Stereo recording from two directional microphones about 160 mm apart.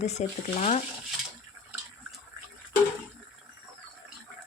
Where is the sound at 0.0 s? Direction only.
45° left (ahead or behind).